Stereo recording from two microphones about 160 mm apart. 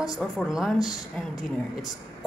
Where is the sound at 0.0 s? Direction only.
Centre (ahead or behind).